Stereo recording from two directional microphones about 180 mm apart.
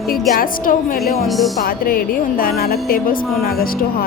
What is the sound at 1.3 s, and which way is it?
Speech, centre (ahead or behind).